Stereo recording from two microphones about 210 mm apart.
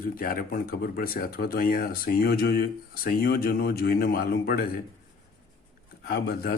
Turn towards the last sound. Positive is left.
turn(degrees=50)  # may be behind; listen again after turning